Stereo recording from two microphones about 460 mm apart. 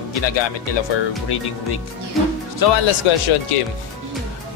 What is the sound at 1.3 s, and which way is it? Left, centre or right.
Speech, left.